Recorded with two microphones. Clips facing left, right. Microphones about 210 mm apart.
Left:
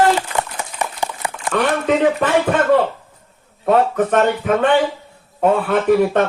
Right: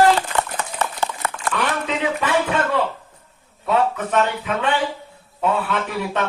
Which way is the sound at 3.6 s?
55° left (ahead or behind).